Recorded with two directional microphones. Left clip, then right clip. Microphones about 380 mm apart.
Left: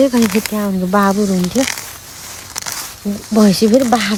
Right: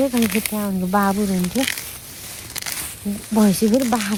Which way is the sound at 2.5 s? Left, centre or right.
Centre.